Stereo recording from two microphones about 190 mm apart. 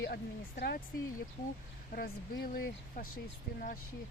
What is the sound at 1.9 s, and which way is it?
Speech, 55° left (ahead or behind).